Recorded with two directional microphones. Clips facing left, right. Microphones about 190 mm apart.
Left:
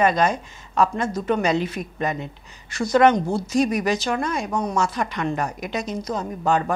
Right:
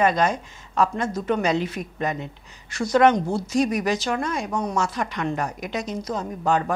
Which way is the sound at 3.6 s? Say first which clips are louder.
Left 1 dB; 10° left (ahead or behind).